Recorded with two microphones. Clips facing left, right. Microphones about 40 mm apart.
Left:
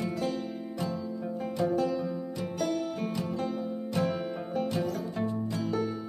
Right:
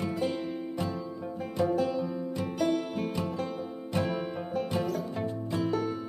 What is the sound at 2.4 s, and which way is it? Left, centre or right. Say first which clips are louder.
Music: right 3 dB; centre.